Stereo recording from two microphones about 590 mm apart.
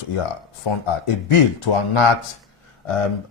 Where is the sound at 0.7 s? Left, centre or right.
Left.